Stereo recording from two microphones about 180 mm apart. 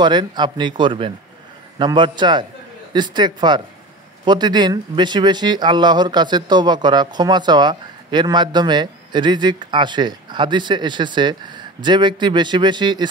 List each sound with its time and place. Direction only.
0.0 s a man's voice: 25° right (ahead or behind)